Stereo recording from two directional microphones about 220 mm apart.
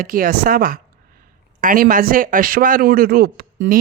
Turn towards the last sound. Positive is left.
turn(degrees=-40)  # may be behind; listen again after turning